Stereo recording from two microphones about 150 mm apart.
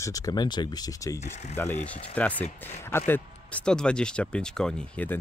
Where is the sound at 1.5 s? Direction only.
15° left (ahead or behind).